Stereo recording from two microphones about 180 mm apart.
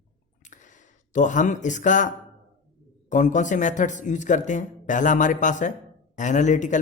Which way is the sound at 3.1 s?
45° left (ahead or behind).